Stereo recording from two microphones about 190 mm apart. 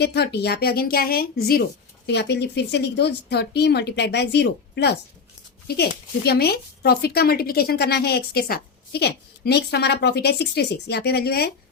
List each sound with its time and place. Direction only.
0.0 s speech: 60° left (ahead or behind)